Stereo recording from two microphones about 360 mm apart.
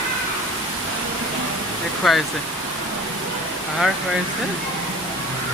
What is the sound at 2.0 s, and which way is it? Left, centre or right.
Speech, centre.